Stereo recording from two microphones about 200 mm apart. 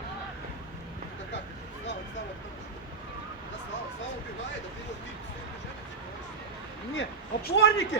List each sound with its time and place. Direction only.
6.9 s a man's voice: 60° left (ahead or behind)